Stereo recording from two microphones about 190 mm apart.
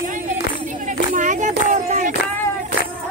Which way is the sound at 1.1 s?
40° right (ahead or behind).